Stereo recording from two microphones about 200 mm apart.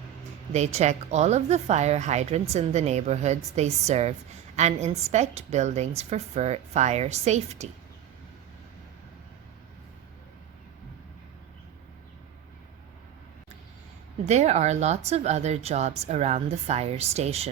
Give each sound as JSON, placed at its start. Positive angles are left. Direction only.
{"t": 0.5, "sound": "speech", "side_deg": -35}
{"t": 14.3, "sound": "speech", "side_deg": -35}